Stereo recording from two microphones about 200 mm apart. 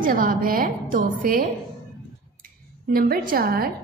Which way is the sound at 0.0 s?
45° right (ahead or behind).